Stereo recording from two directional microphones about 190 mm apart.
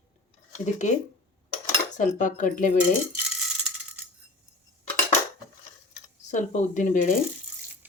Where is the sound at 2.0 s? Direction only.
40° left (ahead or behind).